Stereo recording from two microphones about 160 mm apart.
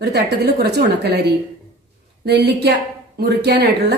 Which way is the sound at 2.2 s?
90° right.